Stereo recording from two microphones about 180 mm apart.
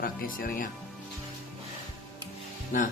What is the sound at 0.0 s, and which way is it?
Speech, 55° left (ahead or behind).